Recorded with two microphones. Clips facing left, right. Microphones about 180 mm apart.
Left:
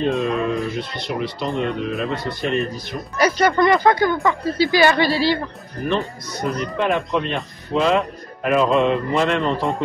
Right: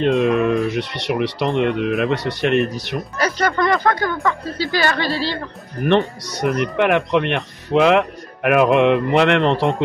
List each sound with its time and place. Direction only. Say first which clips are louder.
0.2 s speech: right 5 dB; 65° right (ahead or behind)
3.2 s speech: left 3 dB; 10° left (ahead or behind)
5.9 s speech: right 6 dB; 70° right (ahead or behind)